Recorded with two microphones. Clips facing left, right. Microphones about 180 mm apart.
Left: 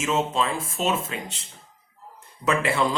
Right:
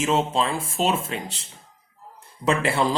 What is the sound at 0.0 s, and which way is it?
Speech, 30° right (ahead or behind).